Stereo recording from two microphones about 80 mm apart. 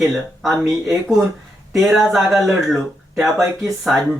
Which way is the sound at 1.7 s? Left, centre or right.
Centre.